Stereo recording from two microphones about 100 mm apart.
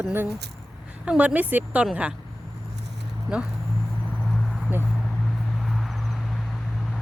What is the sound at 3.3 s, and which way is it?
Speech, 5° right (ahead or behind).